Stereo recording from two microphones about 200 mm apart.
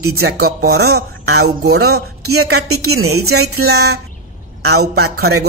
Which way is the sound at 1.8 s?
90° right.